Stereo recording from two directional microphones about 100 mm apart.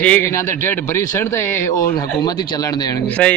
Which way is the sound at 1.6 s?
35° left (ahead or behind).